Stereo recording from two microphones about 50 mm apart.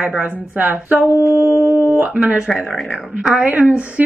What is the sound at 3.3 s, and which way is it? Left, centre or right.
Speech, right.